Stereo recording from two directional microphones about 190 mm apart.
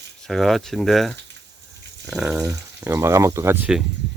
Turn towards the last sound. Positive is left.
turn(degrees=-10)  # may be behind; listen again after turning